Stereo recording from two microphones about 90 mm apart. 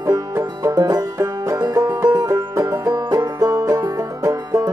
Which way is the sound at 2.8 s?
50° right (ahead or behind).